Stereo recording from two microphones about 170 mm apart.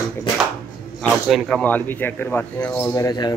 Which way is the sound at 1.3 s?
Centre (ahead or behind).